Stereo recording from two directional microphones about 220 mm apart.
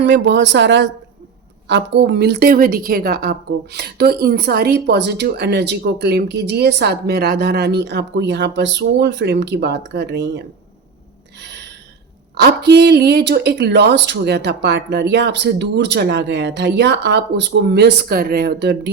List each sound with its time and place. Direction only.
0.0 s a woman's voice: 55° right (ahead or behind)
12.4 s a woman's voice: 50° right (ahead or behind)